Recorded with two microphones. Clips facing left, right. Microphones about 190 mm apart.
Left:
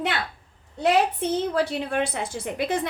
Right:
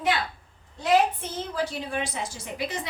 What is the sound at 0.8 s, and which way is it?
A woman's voice, 65° left (ahead or behind).